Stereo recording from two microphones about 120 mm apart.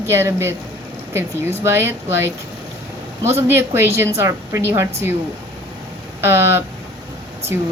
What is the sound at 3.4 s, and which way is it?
A woman's voice, 20° right (ahead or behind).